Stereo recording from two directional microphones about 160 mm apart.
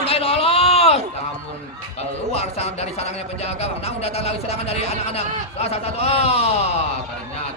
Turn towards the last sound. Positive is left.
turn(degrees=40)  # may be behind; listen again after turning